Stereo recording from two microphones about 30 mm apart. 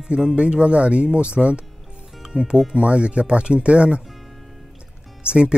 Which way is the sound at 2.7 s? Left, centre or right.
Right.